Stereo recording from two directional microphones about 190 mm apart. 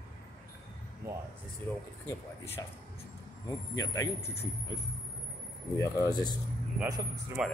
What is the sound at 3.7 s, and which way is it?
Speech, 20° left (ahead or behind).